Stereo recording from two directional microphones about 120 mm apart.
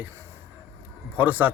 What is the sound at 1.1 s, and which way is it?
Speech, 15° right (ahead or behind).